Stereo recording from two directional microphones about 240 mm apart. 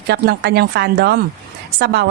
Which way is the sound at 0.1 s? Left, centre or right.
Right.